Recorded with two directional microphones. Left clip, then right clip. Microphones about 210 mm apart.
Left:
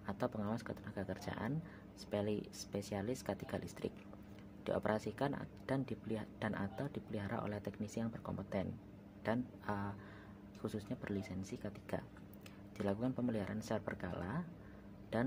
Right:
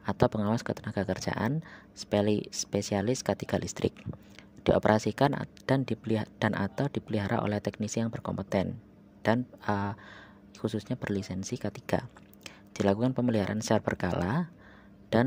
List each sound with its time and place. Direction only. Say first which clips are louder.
0.0 s speech: right 13 dB; 45° right (ahead or behind)